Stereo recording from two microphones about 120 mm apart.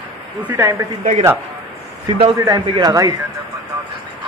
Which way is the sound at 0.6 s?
25° right (ahead or behind).